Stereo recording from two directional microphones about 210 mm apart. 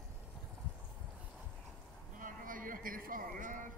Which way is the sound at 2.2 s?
40° right (ahead or behind).